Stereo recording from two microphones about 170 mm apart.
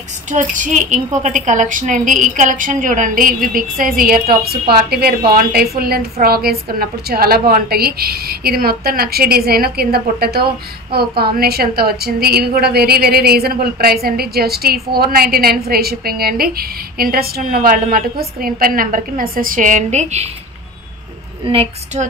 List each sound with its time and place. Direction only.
0.3 s a woman's voice: 45° right (ahead or behind)
21.5 s a woman's voice: 35° right (ahead or behind)